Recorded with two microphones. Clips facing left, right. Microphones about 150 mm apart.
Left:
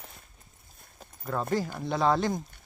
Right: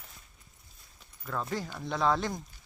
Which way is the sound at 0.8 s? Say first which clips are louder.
Left 7 dB; 45° left (ahead or behind).